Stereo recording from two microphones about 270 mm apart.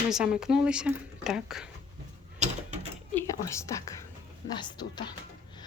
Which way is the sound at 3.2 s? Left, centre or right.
Centre.